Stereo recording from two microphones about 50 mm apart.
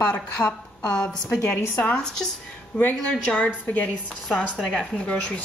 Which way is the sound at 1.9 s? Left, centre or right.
Centre.